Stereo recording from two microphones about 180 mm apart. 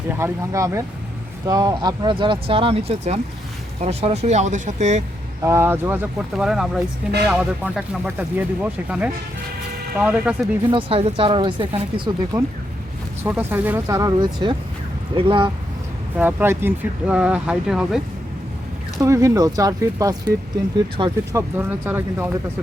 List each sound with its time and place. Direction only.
0.1 s speech: 15° right (ahead or behind); by 5.0 s 40° right (ahead or behind)
5.4 s speech: 15° right (ahead or behind)
10.7 s speech: 30° right (ahead or behind)
13.2 s speech: 10° right (ahead or behind); by 15.4 s 30° right (ahead or behind)
16.1 s speech: 10° right (ahead or behind)
18.9 s speech: 15° right (ahead or behind)
21.3 s speech: 10° right (ahead or behind)